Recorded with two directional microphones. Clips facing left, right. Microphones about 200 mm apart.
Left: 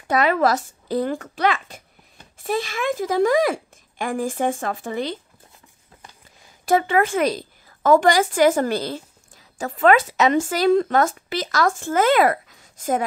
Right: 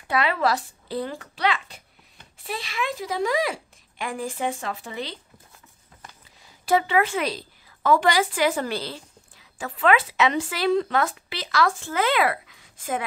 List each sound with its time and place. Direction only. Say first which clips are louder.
0.1 s speech: left 5 dB; 45° left (ahead or behind)
6.6 s speech: left 3 dB; 50° left (ahead or behind)